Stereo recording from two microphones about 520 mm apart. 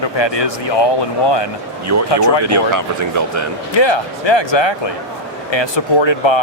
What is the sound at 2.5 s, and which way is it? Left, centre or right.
Speech, right.